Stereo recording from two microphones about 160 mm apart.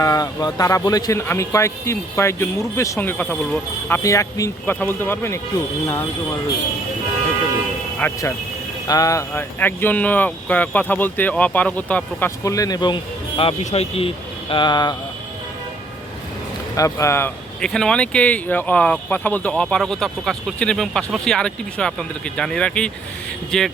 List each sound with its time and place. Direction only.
0.0 s speech: 20° left (ahead or behind)
7.9 s speech: 15° left (ahead or behind)
12.5 s speech: 20° left (ahead or behind); by 14.1 s 40° left (ahead or behind)
14.5 s speech: 30° left (ahead or behind)
16.7 s speech: 20° left (ahead or behind); by 23.7 s centre (ahead or behind)